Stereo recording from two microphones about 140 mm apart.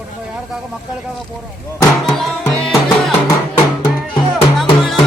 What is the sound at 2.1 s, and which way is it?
Music, centre (ahead or behind).